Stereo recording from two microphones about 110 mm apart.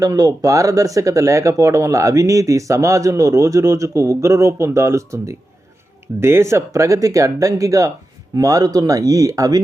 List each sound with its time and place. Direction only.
0.0 s speech: 30° right (ahead or behind)